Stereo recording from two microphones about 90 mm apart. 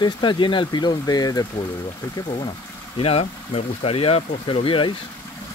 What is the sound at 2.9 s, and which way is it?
Speech, 90° left.